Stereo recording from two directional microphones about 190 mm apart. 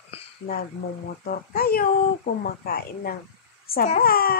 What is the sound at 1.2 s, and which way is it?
A child's voice, 50° left (ahead or behind).